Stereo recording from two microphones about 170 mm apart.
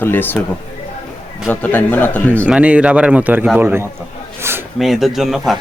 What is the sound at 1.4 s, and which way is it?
Speech, 10° left (ahead or behind).